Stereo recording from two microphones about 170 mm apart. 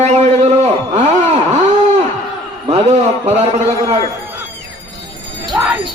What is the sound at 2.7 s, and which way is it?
Speech, 40° right (ahead or behind).